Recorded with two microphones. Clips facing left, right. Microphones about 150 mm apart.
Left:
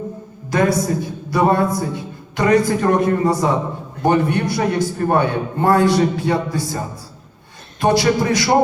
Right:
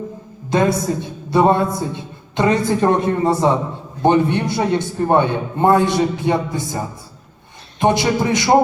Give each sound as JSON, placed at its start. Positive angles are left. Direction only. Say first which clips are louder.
{"t": 0.5, "sound": "a man's voice", "louder": "even", "side_deg": -25}